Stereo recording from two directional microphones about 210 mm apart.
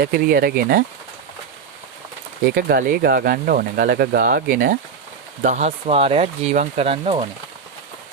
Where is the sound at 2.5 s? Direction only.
45° right (ahead or behind); by 7.3 s 30° right (ahead or behind).